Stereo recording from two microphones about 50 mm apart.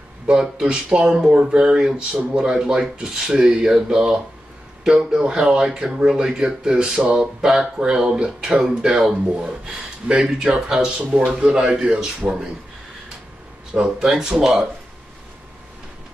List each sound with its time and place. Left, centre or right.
0.3 s speech: centre
13.7 s speech: centre